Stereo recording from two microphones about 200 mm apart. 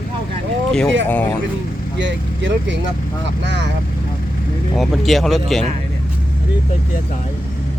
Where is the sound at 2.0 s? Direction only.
65° right (ahead or behind).